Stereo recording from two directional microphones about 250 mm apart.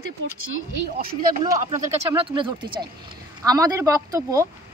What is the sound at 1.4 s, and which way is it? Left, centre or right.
Speech, centre.